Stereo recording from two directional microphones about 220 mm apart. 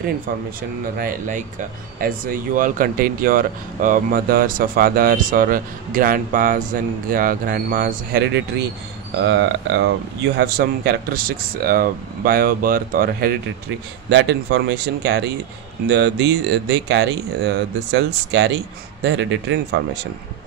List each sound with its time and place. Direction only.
0.6 s speech: 40° right (ahead or behind)
14.0 s speech: 50° right (ahead or behind)